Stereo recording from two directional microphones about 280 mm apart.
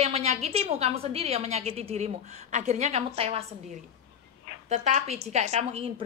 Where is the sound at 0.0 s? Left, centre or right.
Right.